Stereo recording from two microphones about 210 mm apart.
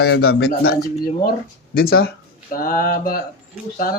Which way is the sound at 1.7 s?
45° left (ahead or behind).